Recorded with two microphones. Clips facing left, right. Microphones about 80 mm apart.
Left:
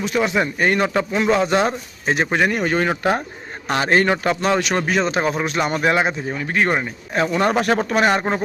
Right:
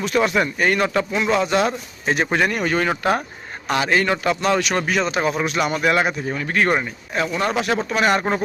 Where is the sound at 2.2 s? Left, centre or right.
Centre.